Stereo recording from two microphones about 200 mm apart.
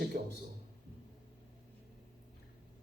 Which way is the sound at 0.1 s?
40° right (ahead or behind).